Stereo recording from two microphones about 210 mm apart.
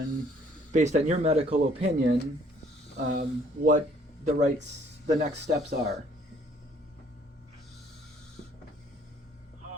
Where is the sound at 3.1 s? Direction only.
40° right (ahead or behind).